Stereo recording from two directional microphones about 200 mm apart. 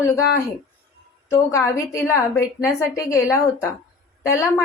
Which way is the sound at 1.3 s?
15° left (ahead or behind).